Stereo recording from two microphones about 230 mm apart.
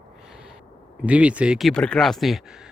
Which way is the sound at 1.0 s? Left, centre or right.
Centre.